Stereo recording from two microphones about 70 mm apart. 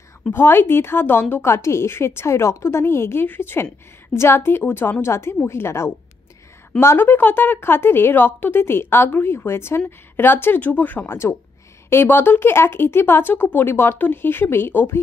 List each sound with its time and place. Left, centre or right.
0.3 s speech: left